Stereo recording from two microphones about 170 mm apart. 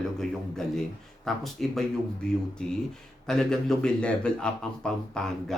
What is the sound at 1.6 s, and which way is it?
Speech, centre (ahead or behind).